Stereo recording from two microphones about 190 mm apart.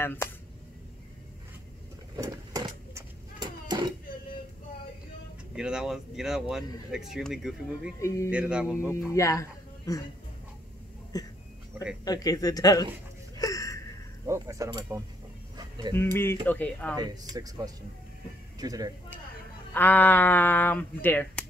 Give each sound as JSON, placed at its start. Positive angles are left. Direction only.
{"t": 0.0, "sound": "speech", "side_deg": 10}
{"t": 2.1, "sound": "a sound", "side_deg": -15}
{"t": 5.6, "sound": "speech", "side_deg": -5}
{"t": 8.0, "sound": "speech", "side_deg": 15}
{"t": 8.3, "sound": "speech", "side_deg": -5}
{"t": 9.1, "sound": "speech", "side_deg": 15}
{"t": 11.1, "sound": "a man's voice", "side_deg": 20}
{"t": 13.4, "sound": "wheeze", "side_deg": 15}
{"t": 14.2, "sound": "speech", "side_deg": -15}
{"t": 15.9, "sound": "speech", "side_deg": 10}
{"t": 16.9, "sound": "speech", "side_deg": -20}
{"t": 19.7, "sound": "speech", "side_deg": 10}